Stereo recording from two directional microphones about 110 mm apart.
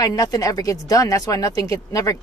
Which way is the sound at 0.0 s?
35° left (ahead or behind).